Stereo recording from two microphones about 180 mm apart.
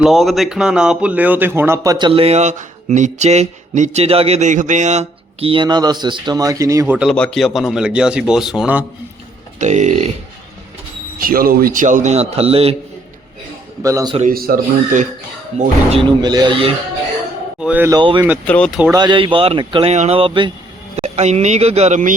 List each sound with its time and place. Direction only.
0.0 s speech: centre (ahead or behind); by 6.9 s 15° right (ahead or behind)
6.9 s speech: 5° right (ahead or behind)
9.6 s a sound: 40° right (ahead or behind)
11.2 s speech: 55° right (ahead or behind); by 12.7 s 35° right (ahead or behind)
13.8 s speech: 20° right (ahead or behind)
14.2 s speech: 55° right (ahead or behind)
15.5 s speech: 35° right (ahead or behind)
17.6 s speech: 10° right (ahead or behind)
17.9 s speech: 25° right (ahead or behind)
18.4 s speech: 5° left (ahead or behind)
18.9 s speech: 25° right (ahead or behind); by 22.1 s 40° right (ahead or behind)